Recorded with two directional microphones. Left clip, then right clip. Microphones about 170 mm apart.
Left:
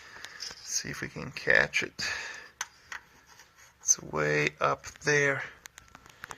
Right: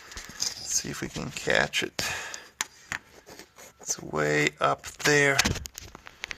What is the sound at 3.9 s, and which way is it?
Speech, 5° right (ahead or behind).